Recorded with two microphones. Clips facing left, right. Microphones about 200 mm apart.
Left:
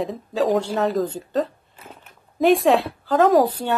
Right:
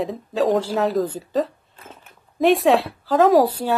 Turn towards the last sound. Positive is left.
turn(degrees=0)  # may be behind; listen again after turning